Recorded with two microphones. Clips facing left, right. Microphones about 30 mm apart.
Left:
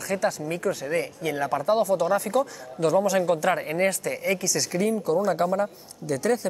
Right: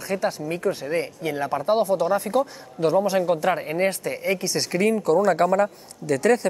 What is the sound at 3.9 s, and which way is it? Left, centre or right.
Speech, right.